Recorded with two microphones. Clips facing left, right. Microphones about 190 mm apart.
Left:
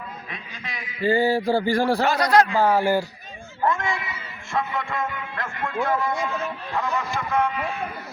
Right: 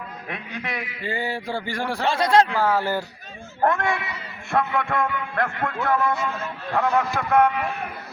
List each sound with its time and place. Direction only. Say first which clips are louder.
0.3 s a man's voice: right 6 dB; 60° right (ahead or behind)
1.0 s a sound: left 9 dB; 35° left (ahead or behind)
2.0 s speech: right 4 dB; 25° right (ahead or behind)
2.6 s speech: left 3 dB; 15° left (ahead or behind)
3.6 s a man's voice: right 2 dB; 65° right (ahead or behind)